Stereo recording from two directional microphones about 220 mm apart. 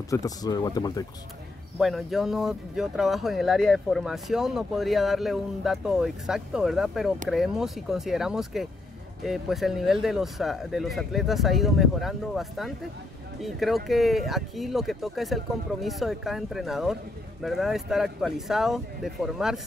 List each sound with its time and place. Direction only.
0.1 s speech: 15° left (ahead or behind)
1.8 s speech: centre (ahead or behind)